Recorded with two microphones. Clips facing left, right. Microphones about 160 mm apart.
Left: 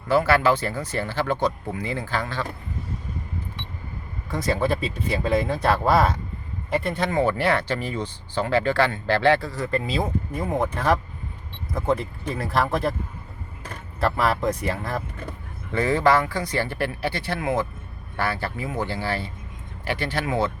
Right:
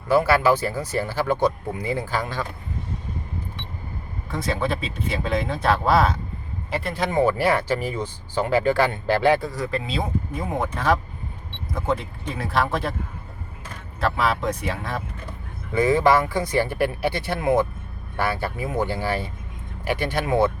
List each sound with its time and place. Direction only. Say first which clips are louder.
0.1 s speech: right 1 dB; 10° right (ahead or behind)
4.4 s speech: left 2 dB; centre (ahead or behind); by 9.6 s 15° right (ahead or behind)
9.7 s speech: left 4 dB; centre (ahead or behind)
14.0 s speech: left 1 dB; centre (ahead or behind)
15.7 s speech: right 2 dB; 15° right (ahead or behind)